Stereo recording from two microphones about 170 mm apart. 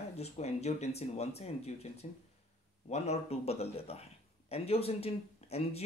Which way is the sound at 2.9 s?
40° left (ahead or behind).